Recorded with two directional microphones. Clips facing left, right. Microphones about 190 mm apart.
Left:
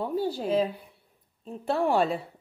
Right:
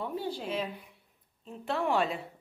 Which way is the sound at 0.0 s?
35° left (ahead or behind).